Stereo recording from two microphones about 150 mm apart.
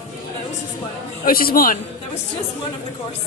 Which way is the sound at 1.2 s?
75° left (ahead or behind).